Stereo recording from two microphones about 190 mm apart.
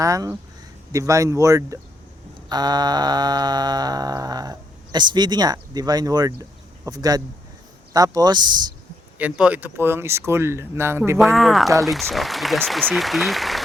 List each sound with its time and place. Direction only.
0.0 s speech: 20° right (ahead or behind)
2.5 s music: 20° right (ahead or behind)
9.1 s speech: 5° right (ahead or behind)
11.2 s speech: centre (ahead or behind)